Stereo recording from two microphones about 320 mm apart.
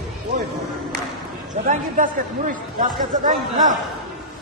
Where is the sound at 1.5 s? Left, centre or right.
Right.